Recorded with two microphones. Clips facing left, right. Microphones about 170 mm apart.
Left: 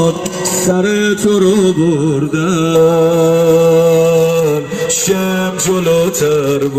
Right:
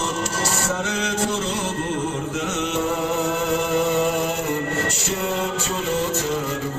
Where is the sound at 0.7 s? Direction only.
70° left (ahead or behind).